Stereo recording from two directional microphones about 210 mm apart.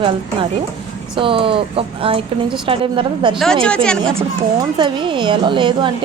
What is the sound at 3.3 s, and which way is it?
Speech, centre (ahead or behind).